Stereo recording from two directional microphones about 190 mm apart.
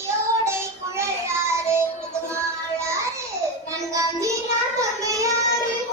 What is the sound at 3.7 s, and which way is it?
Child singing, 15° right (ahead or behind).